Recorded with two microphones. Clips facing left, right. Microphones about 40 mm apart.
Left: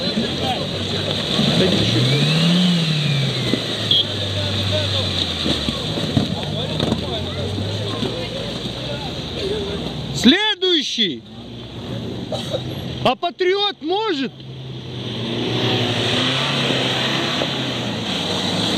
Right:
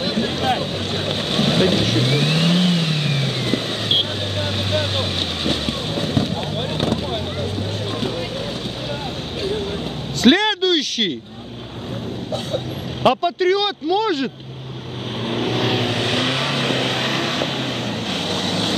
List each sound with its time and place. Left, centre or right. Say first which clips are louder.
0.0 s boat: right 1 dB; left
7.9 s music: even; left
9.4 s a sound: even; left
13.0 s vehicle: right 2 dB; centre
13.4 s speech: even; left
15.3 s vehicle: even; left